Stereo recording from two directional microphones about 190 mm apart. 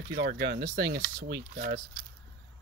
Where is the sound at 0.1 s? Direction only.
55° right (ahead or behind).